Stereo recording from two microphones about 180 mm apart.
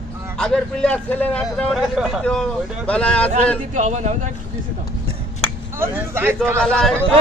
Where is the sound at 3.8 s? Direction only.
40° right (ahead or behind).